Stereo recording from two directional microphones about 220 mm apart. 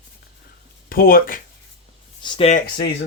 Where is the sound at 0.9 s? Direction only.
40° left (ahead or behind).